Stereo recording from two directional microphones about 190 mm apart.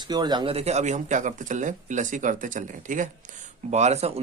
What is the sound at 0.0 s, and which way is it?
Speech, 20° right (ahead or behind).